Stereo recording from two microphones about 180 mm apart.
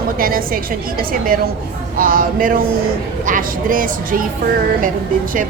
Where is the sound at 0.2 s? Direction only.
55° right (ahead or behind).